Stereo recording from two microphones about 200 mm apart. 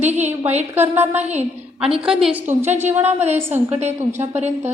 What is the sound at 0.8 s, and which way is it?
Speech, 10° right (ahead or behind).